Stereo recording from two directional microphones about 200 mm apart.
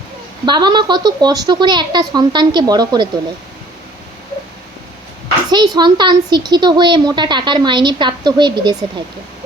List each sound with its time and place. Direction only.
0.4 s a woman's voice: 20° right (ahead or behind)
5.5 s a woman's voice: 20° right (ahead or behind)